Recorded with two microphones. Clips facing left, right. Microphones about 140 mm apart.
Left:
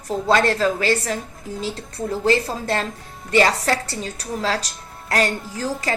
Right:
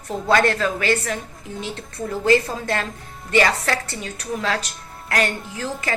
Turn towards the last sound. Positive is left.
turn(degrees=35)  # may be behind; listen again after turning